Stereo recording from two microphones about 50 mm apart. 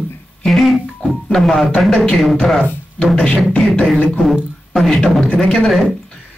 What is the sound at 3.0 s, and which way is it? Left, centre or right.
Speech, centre.